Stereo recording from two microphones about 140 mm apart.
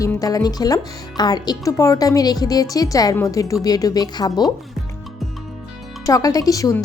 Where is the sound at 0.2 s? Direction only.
25° left (ahead or behind).